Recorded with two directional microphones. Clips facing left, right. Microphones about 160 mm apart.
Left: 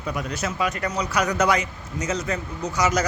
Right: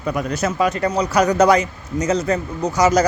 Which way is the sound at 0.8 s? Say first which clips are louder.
Right 7 dB; 35° right (ahead or behind).